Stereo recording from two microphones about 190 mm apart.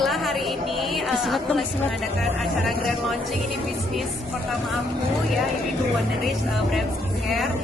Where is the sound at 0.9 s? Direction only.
Centre (ahead or behind).